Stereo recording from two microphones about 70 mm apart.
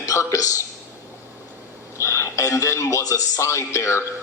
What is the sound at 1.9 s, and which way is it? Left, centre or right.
A man's voice, left.